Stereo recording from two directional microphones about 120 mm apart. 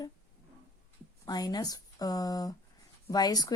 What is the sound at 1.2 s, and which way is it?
A woman's voice, 35° left (ahead or behind).